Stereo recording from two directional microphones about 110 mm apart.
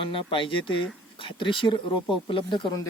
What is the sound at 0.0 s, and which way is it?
Speech, 50° left (ahead or behind).